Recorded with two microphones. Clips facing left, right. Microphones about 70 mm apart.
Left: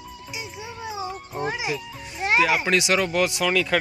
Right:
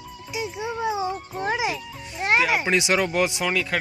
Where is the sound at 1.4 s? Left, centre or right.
Right.